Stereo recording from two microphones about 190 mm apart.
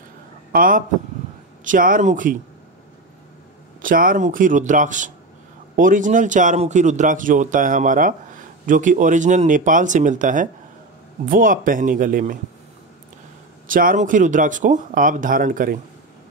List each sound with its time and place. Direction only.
0.5 s a man's voice: 45° right (ahead or behind)
3.8 s speech: 45° right (ahead or behind)
13.7 s speech: 45° right (ahead or behind)